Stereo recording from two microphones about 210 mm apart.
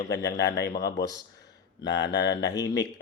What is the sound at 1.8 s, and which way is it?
Speech, 55° left (ahead or behind).